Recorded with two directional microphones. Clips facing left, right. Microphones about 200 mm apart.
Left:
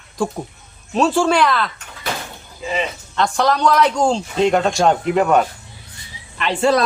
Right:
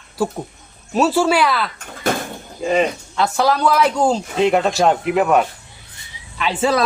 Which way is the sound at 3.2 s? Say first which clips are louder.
Even; 5° right (ahead or behind).